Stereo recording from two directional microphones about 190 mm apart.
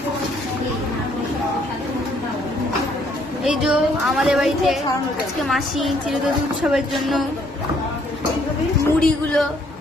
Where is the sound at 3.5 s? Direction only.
5° right (ahead or behind).